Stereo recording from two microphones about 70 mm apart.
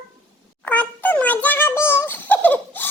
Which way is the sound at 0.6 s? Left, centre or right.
Left.